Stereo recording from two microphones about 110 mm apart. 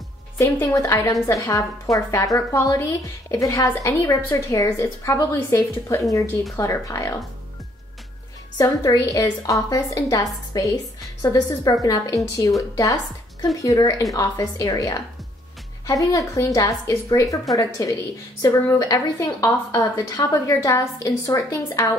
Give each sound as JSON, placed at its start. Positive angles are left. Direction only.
{"t": 0.4, "sound": "a woman's voice", "side_deg": 25}
{"t": 8.5, "sound": "a woman's voice", "side_deg": 30}